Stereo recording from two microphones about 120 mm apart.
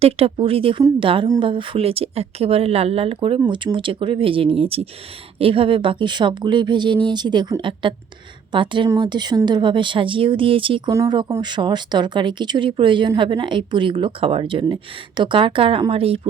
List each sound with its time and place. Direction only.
0.0 s speech: 55° right (ahead or behind)